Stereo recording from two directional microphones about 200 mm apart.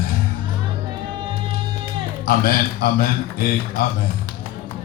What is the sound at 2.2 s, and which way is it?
Speech, 50° left (ahead or behind).